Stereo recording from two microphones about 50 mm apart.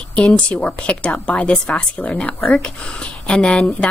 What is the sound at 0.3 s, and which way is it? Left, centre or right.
A woman's voice, left.